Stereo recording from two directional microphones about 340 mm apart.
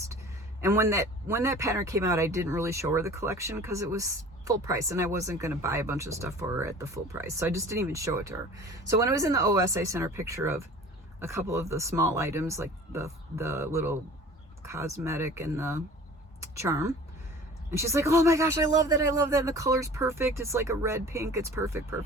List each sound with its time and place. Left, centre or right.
0.6 s a woman's voice: centre